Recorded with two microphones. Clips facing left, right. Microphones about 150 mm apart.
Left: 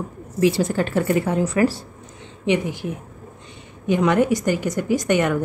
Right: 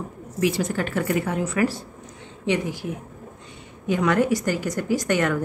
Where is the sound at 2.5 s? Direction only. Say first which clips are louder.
Left 3 dB; 20° left (ahead or behind).